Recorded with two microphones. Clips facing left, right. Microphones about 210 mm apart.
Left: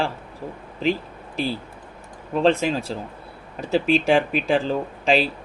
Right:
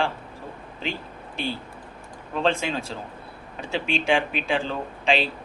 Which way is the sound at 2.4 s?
40° left (ahead or behind).